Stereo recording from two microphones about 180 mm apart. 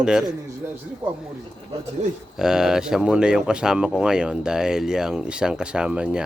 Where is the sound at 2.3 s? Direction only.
5° right (ahead or behind).